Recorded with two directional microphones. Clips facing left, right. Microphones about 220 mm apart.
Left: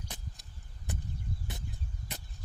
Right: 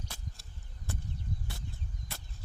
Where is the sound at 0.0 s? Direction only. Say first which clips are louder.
Even; 15° left (ahead or behind).